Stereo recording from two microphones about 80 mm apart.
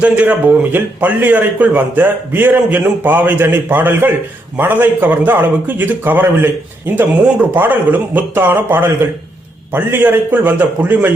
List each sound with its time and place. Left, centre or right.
0.0 s a man's voice: right